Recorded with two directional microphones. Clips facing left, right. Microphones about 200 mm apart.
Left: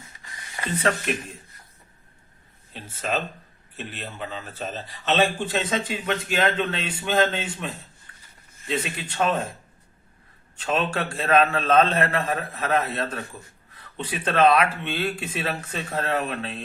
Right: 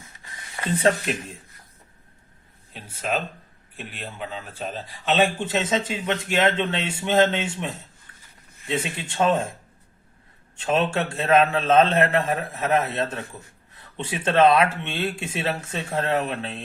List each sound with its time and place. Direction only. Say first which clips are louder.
2.7 s a man's voice: right 1 dB; 10° right (ahead or behind); by 9.5 s 25° right (ahead or behind)
10.6 s a man's voice: right 3 dB; 25° right (ahead or behind)